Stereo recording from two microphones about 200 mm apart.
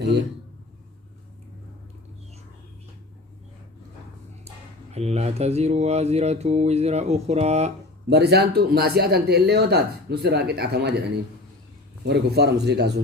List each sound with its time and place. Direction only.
4.4 s speech: 30° right (ahead or behind)
8.1 s speech: 55° right (ahead or behind)